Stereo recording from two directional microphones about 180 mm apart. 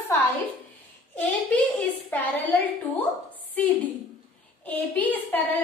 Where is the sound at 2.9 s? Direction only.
10° left (ahead or behind).